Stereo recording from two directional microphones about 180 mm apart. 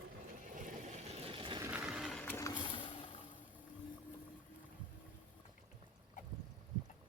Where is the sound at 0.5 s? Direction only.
45° right (ahead or behind).